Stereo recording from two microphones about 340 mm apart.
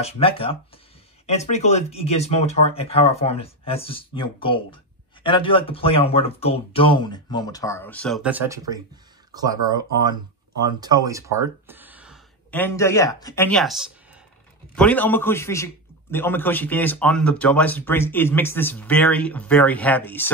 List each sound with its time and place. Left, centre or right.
0.0 s a man's voice: centre